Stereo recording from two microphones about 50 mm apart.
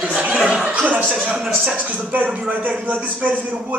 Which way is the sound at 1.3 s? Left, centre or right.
Centre.